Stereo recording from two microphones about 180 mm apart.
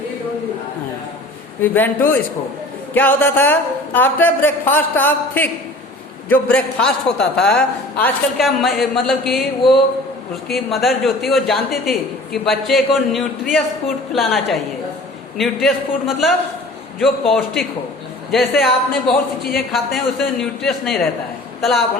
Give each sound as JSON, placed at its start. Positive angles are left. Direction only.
{"t": 1.6, "sound": "a man's voice", "side_deg": 10}
{"t": 10.5, "sound": "a woman's voice", "side_deg": 0}
{"t": 19.4, "sound": "speech", "side_deg": 55}
{"t": 19.7, "sound": "a woman's voice", "side_deg": 0}